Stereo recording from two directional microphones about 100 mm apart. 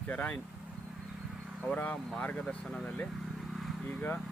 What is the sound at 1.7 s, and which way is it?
Speech, 15° left (ahead or behind).